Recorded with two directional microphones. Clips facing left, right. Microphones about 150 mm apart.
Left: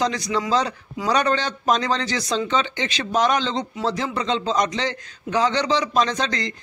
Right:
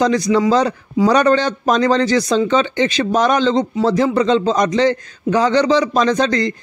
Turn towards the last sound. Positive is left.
turn(degrees=-45)  # may be behind; listen again after turning